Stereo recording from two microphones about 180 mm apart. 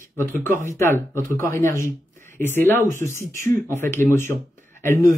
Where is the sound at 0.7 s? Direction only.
15° left (ahead or behind).